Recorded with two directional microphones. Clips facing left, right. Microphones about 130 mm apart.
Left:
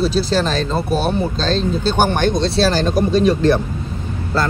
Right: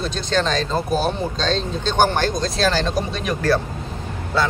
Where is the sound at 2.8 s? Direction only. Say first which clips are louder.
Left 8 dB; 50° left (ahead or behind).